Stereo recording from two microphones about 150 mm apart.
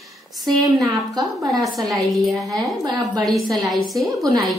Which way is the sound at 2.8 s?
25° right (ahead or behind).